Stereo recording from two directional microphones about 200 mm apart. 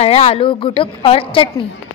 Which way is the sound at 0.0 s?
30° left (ahead or behind).